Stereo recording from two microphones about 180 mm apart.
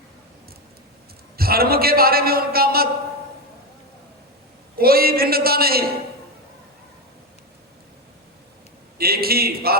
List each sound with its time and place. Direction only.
1.4 s a man's voice: 55° right (ahead or behind)
4.8 s a man's voice: 55° right (ahead or behind)
9.0 s a man's voice: 60° right (ahead or behind)